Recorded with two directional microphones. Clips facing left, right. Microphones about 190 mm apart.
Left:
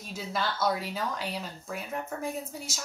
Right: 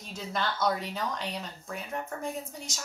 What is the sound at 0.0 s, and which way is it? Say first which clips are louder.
A woman's voice: even; 5° left (ahead or behind).